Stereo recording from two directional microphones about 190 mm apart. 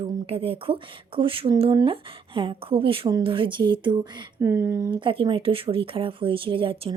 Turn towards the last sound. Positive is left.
turn(degrees=-25)  # may be behind; listen again after turning